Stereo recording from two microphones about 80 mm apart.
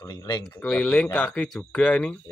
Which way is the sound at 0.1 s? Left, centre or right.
Left.